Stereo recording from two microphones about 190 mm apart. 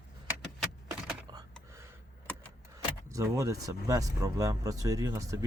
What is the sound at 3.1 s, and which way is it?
Speech, 15° right (ahead or behind).